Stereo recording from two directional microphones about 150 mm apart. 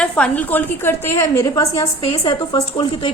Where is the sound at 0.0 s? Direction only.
10° left (ahead or behind).